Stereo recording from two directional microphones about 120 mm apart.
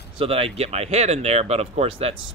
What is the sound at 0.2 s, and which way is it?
Speech, 50° right (ahead or behind).